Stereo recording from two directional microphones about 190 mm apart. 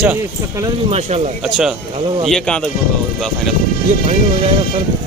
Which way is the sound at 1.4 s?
Centre (ahead or behind).